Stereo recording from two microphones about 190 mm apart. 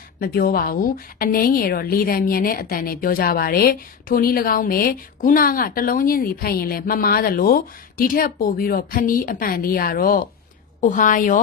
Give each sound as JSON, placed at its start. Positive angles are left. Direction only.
{"t": 0.2, "sound": "a woman's voice", "side_deg": 50}